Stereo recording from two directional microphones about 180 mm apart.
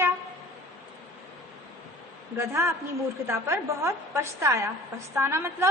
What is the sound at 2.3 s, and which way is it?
A woman's voice, 15° right (ahead or behind).